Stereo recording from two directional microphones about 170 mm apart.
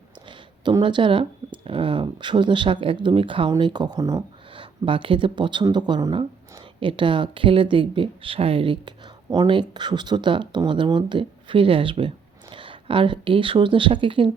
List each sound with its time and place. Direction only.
0.3 s speech: 25° right (ahead or behind)